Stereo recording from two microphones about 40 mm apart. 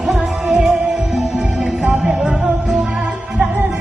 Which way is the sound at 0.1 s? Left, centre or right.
Centre.